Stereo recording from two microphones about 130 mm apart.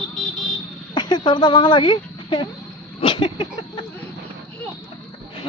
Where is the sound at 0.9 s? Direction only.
35° left (ahead or behind).